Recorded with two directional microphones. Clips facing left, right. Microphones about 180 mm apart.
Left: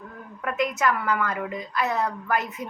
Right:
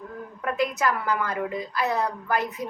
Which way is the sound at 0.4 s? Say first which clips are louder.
Even; 35° right (ahead or behind).